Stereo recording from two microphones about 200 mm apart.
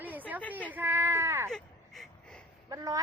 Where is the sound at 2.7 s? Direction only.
15° right (ahead or behind).